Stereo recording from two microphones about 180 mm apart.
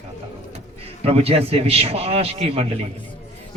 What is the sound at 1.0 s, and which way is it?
A man's voice, 35° right (ahead or behind).